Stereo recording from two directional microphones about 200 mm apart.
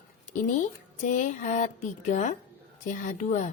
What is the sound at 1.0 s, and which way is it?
A woman's voice, 40° left (ahead or behind).